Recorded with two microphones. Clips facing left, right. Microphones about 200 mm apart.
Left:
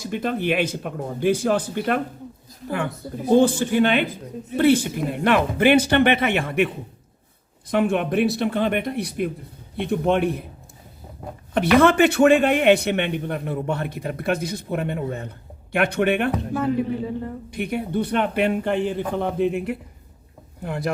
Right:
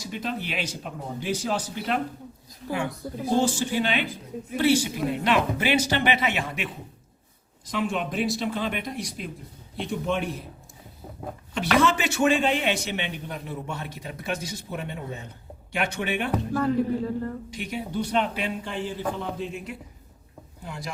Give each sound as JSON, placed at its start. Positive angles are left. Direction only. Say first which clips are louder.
{"t": 0.0, "sound": "speech", "louder": "left 7 dB", "side_deg": 55}
{"t": 7.7, "sound": "speech", "louder": "left 7 dB", "side_deg": 60}
{"t": 11.5, "sound": "speech", "louder": "left 7 dB", "side_deg": 55}
{"t": 16.3, "sound": "speech", "louder": "left 1 dB", "side_deg": 10}
{"t": 17.5, "sound": "speech", "louder": "left 6 dB", "side_deg": 60}